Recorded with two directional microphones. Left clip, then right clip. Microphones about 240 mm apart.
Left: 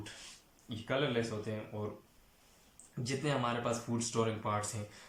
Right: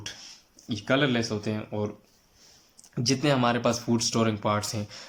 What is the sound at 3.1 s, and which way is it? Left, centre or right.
Speech, right.